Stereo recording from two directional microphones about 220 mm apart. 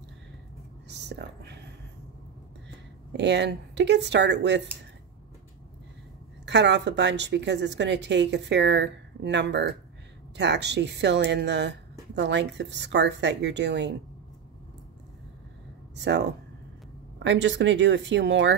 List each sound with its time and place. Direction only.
0.8 s speech: 50° right (ahead or behind)
3.1 s a woman's voice: 50° right (ahead or behind)
6.4 s a woman's voice: 50° right (ahead or behind)
16.0 s a woman's voice: 50° right (ahead or behind)